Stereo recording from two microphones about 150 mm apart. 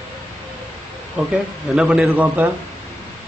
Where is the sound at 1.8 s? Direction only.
5° right (ahead or behind).